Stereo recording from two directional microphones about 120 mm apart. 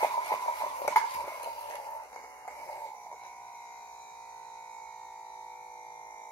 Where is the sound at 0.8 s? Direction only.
25° left (ahead or behind).